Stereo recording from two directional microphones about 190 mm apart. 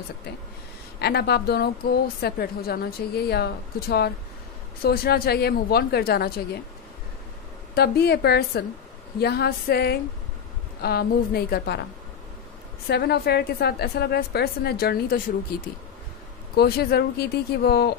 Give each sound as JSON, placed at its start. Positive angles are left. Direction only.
{"t": 0.9, "sound": "a woman's voice", "side_deg": 60}
{"t": 7.7, "sound": "a woman's voice", "side_deg": 60}
{"t": 12.8, "sound": "a woman's voice", "side_deg": 60}